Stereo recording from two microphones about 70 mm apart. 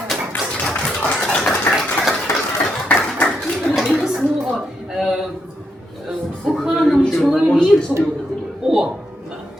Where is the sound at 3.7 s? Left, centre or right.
Centre.